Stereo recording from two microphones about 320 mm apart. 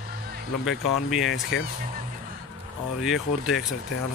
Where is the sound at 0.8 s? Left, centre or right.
Centre.